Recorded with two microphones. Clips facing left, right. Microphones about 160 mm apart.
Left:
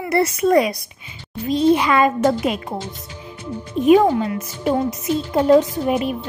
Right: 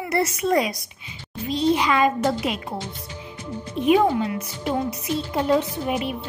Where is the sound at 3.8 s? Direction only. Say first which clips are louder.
Left 5 dB; 45° left (ahead or behind).